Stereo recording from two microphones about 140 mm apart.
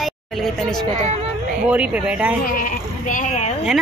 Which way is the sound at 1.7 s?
10° right (ahead or behind).